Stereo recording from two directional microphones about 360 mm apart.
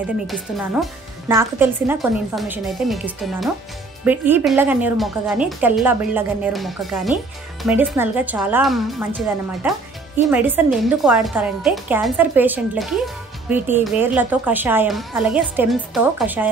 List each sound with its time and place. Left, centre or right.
0.3 s speech: centre